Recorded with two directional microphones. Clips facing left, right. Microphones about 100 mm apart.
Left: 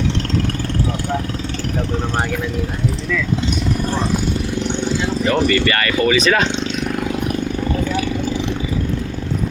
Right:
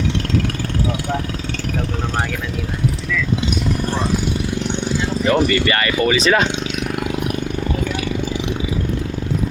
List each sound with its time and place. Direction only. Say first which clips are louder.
5.3 s speech: right 1 dB; 20° right (ahead or behind)